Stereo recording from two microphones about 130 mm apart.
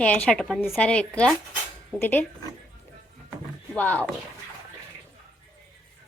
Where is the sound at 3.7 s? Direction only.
10° left (ahead or behind).